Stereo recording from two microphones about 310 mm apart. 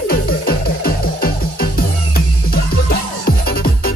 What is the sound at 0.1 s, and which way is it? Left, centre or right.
Music, left.